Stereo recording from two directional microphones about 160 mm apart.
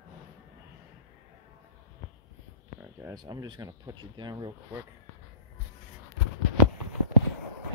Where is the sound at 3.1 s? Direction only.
25° right (ahead or behind).